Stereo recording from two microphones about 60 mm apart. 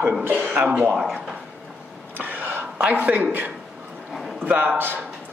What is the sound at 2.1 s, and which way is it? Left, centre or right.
Whispering, right.